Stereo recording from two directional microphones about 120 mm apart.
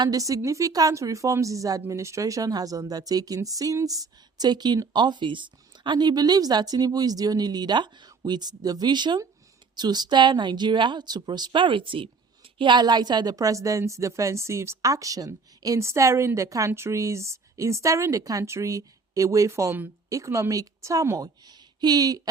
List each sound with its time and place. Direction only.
0.0 s a woman's voice: 30° right (ahead or behind)